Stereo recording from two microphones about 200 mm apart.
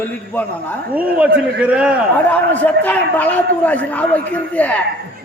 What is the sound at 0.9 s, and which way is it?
A man's voice, 10° right (ahead or behind).